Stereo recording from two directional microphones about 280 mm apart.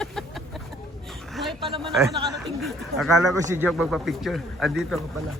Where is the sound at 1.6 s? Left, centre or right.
Centre.